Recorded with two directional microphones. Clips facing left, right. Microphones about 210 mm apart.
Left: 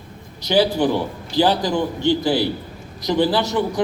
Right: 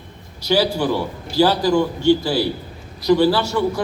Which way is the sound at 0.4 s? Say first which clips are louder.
Left 1 dB; 20° left (ahead or behind).